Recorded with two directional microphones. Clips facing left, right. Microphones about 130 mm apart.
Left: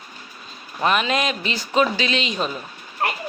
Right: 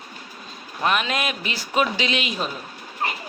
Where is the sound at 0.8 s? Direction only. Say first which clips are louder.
Left 3 dB; centre (ahead or behind).